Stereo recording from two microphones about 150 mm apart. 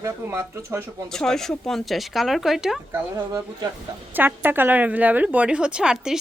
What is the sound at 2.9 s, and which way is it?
Speech, 25° right (ahead or behind).